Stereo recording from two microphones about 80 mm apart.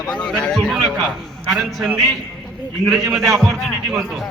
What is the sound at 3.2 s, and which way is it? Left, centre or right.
Speech, centre.